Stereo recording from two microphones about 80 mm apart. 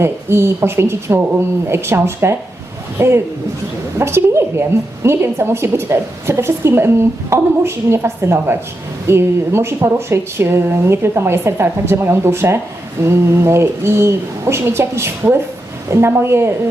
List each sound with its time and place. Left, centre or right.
0.0 s a woman's voice: right